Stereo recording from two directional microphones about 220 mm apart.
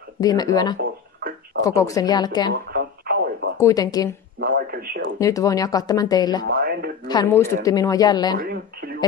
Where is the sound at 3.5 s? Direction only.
15° left (ahead or behind).